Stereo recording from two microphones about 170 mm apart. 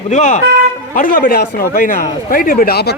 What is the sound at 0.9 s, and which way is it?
A man's voice, 55° left (ahead or behind).